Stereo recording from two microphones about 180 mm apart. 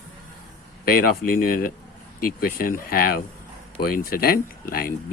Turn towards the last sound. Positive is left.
turn(degrees=55)  # may be behind; listen again after turning